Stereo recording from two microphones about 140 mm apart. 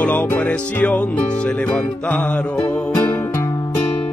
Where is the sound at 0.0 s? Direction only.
10° left (ahead or behind).